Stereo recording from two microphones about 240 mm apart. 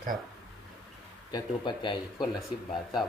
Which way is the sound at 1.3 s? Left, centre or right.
Centre.